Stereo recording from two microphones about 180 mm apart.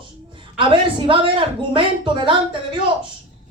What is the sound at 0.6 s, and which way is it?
Speech, 25° right (ahead or behind).